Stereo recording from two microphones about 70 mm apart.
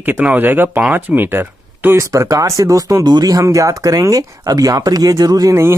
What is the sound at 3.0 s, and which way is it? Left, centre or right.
Speech, right.